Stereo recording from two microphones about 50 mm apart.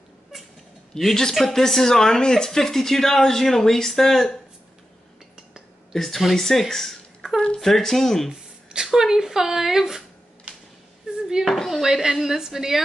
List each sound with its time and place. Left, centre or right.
0.9 s speech: centre
5.9 s speech: centre
8.3 s a sound: centre
11.4 s speech: centre
11.8 s a woman's voice: centre